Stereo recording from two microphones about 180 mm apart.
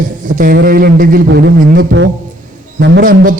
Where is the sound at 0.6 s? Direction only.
60° right (ahead or behind).